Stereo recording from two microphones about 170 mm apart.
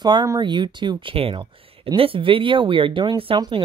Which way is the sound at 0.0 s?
25° right (ahead or behind).